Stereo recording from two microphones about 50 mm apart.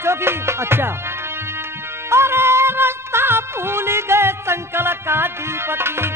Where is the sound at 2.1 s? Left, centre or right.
Right.